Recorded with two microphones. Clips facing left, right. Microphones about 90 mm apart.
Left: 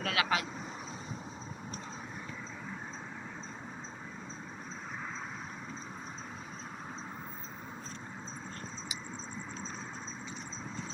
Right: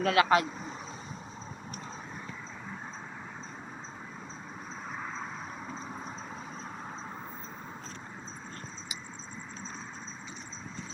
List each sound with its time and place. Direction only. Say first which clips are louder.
0.0 s speech: right 8 dB; 45° right (ahead or behind)